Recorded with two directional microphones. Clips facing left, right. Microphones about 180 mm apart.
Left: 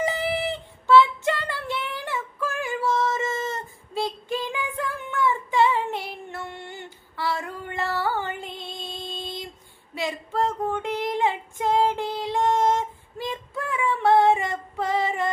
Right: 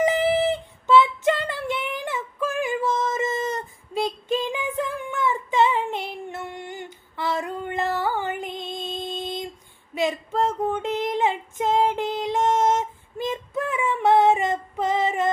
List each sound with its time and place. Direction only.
0.0 s female singing: 20° right (ahead or behind)
9.9 s child singing: 20° right (ahead or behind)